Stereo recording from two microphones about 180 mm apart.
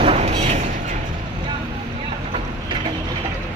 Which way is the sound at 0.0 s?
35° right (ahead or behind).